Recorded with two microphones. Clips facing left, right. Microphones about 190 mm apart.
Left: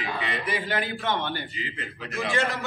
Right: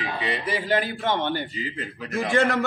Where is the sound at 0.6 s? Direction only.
35° right (ahead or behind).